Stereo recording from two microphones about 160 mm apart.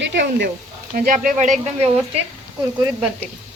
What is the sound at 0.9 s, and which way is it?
Speech, 60° right (ahead or behind).